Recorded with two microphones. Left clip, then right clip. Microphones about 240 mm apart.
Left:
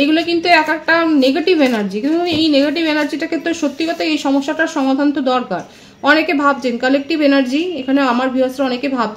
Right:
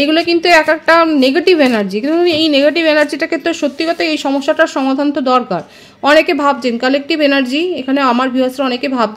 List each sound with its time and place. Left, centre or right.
0.0 s a woman's voice: right